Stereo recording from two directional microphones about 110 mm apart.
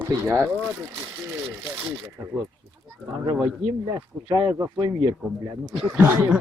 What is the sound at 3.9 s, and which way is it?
Speech, 45° right (ahead or behind).